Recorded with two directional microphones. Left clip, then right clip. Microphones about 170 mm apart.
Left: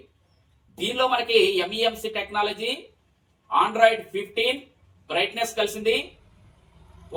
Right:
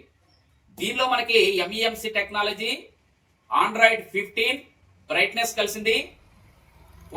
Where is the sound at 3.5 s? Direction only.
15° right (ahead or behind).